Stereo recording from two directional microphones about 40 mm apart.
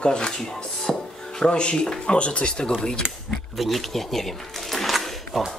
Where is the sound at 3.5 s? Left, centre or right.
Centre.